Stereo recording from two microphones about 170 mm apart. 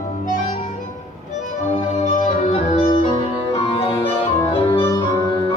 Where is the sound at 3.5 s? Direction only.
35° left (ahead or behind).